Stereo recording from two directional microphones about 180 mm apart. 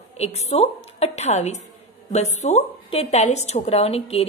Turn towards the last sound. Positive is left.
turn(degrees=35)  # may be behind; listen again after turning